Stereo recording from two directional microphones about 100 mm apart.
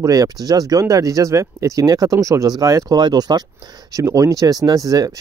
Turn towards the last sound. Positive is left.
turn(degrees=-35)  # may be behind; listen again after turning